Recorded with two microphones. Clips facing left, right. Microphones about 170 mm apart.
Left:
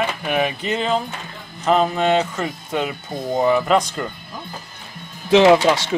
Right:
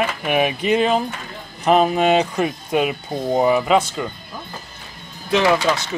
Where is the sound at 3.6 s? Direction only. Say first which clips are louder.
Right 1 dB; centre (ahead or behind).